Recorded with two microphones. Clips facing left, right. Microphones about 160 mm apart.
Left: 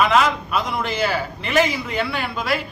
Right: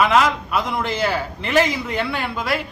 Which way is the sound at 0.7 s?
10° left (ahead or behind).